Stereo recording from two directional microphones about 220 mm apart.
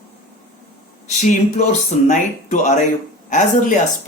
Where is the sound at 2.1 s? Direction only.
35° left (ahead or behind).